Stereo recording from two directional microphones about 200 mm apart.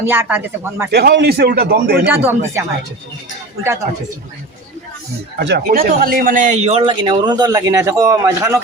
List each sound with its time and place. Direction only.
0.0 s speech: 10° right (ahead or behind)
0.9 s a man's voice: 55° right (ahead or behind)
2.0 s speech: 10° right (ahead or behind)
5.4 s a man's voice: 55° right (ahead or behind); by 8.6 s 15° right (ahead or behind)